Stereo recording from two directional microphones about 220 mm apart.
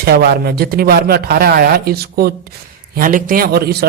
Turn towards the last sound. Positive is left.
turn(degrees=-45)  # may be behind; listen again after turning